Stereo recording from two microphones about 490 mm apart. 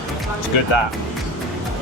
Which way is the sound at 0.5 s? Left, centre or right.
Left.